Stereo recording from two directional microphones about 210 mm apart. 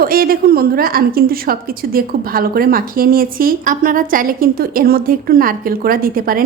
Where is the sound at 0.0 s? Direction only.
45° right (ahead or behind).